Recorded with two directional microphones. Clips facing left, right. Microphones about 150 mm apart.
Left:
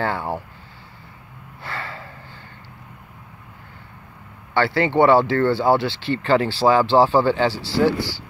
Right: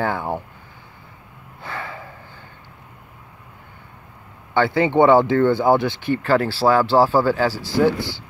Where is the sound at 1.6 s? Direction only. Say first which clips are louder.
Right 1 dB; 15° right (ahead or behind).